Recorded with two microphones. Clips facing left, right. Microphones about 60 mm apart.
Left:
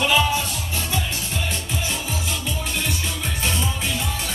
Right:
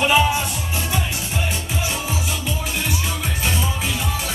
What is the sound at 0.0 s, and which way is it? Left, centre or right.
Music, right.